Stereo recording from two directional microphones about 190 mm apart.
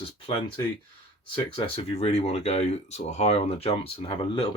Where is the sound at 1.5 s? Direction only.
30° left (ahead or behind).